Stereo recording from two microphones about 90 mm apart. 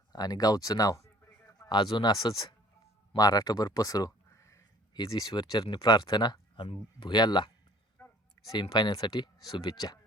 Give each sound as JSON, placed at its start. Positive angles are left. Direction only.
{"t": 0.1, "sound": "speech", "side_deg": 45}
{"t": 1.6, "sound": "speech", "side_deg": 55}
{"t": 4.9, "sound": "speech", "side_deg": 50}
{"t": 6.6, "sound": "speech", "side_deg": 70}
{"t": 8.0, "sound": "a sound", "side_deg": 25}
{"t": 8.7, "sound": "speech", "side_deg": 50}